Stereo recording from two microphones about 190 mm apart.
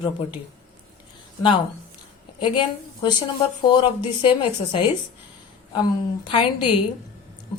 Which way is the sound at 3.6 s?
25° left (ahead or behind).